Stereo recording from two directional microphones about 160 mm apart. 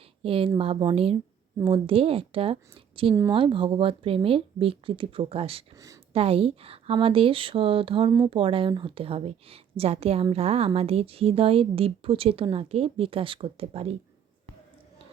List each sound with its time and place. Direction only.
0.2 s a woman's voice: 35° right (ahead or behind)